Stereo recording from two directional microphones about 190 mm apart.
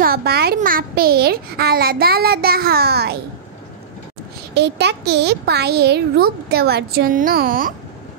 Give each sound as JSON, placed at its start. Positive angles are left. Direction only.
{"t": 0.0, "sound": "a child's voice", "side_deg": -55}
{"t": 4.6, "sound": "a child's voice", "side_deg": -60}